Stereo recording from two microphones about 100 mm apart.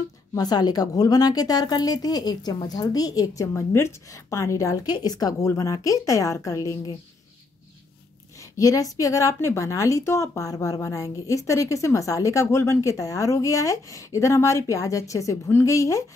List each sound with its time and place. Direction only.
0.3 s a woman's voice: 40° left (ahead or behind)
4.8 s a woman's voice: 45° left (ahead or behind)
8.4 s a woman's voice: 35° left (ahead or behind)